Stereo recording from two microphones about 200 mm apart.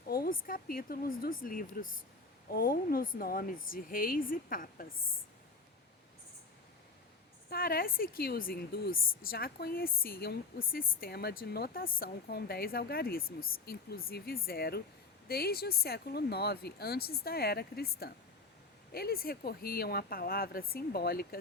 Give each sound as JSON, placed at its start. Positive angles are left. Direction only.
{"t": 0.1, "sound": "a sound", "side_deg": 50}
{"t": 0.4, "sound": "speech", "side_deg": 45}
{"t": 7.5, "sound": "speech", "side_deg": 50}